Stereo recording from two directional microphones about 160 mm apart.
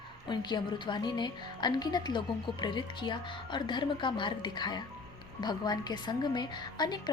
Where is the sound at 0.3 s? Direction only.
30° left (ahead or behind).